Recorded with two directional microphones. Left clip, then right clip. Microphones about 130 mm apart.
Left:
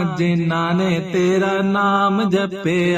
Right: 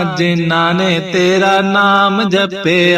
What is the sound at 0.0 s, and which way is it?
Mantra, 20° right (ahead or behind).